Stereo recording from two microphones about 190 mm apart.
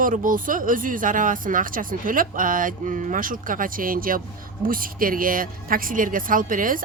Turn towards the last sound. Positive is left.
turn(degrees=-45)  # may be behind; listen again after turning